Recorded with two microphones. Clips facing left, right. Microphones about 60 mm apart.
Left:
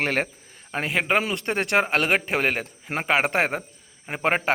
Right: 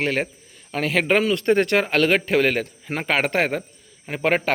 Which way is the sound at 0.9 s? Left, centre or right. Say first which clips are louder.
Right 4 dB; centre.